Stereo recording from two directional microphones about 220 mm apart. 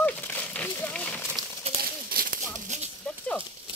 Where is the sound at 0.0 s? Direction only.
10° left (ahead or behind).